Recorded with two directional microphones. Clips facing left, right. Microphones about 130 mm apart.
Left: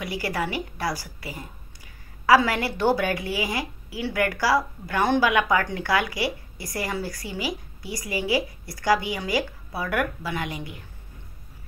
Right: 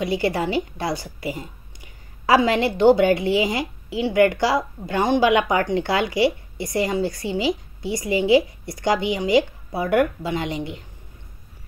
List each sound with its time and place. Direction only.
0.0 s a woman's voice: 25° right (ahead or behind)